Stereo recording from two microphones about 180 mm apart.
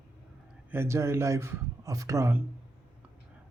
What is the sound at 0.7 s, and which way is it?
A man's voice, 15° right (ahead or behind).